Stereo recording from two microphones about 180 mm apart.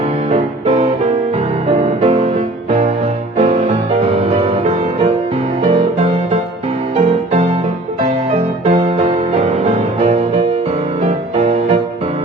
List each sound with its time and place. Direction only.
0.3 s music: 35° right (ahead or behind)
2.0 s music: 30° right (ahead or behind)
9.0 s music: 35° right (ahead or behind)